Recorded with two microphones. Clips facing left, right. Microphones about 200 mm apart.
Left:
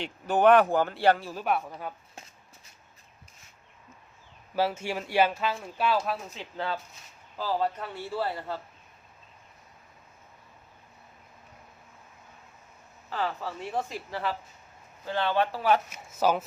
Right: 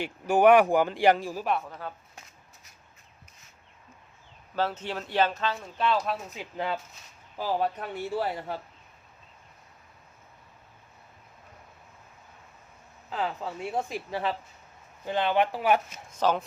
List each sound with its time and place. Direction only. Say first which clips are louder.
0.0 s speech: right 2 dB; 10° right (ahead or behind)
1.6 s speech: left 1 dB; 15° left (ahead or behind)
4.5 s speech: left 2 dB; 10° left (ahead or behind)
6.3 s speech: right 1 dB; 10° right (ahead or behind)
13.1 s speech: even; 20° right (ahead or behind)
16.0 s speech: left 1 dB; 5° left (ahead or behind)